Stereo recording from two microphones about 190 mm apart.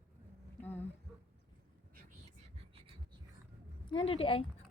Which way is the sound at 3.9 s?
30° left (ahead or behind).